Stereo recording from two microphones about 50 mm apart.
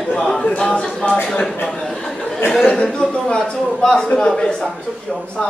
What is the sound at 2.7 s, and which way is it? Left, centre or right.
A man's voice, centre.